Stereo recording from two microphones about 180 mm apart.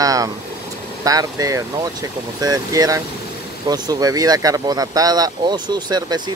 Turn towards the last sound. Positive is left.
turn(degrees=-25)  # may be behind; listen again after turning